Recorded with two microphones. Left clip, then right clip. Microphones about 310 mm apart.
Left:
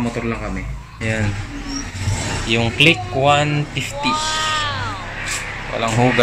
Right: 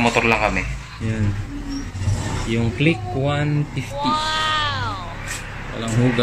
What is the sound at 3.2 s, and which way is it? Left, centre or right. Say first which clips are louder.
Speech: left 8 dB; left.